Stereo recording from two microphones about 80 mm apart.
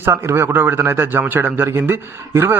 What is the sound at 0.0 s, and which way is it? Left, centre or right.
A man's voice, right.